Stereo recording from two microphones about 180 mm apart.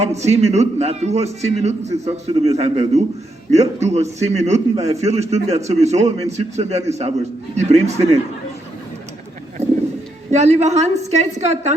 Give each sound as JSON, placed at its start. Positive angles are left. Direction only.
{"t": 0.0, "sound": "a man's voice", "side_deg": -40}
{"t": 10.3, "sound": "a man's voice", "side_deg": -40}